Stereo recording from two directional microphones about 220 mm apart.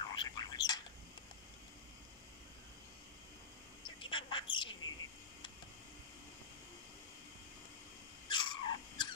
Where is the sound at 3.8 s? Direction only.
20° left (ahead or behind).